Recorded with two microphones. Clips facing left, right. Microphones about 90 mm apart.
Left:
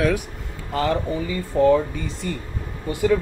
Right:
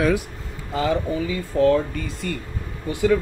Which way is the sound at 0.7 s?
10° right (ahead or behind).